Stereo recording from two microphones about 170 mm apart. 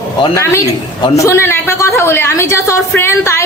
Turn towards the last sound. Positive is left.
turn(degrees=15)  # may be behind; listen again after turning